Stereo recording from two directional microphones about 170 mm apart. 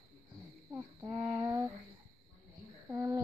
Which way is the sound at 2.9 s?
15° right (ahead or behind).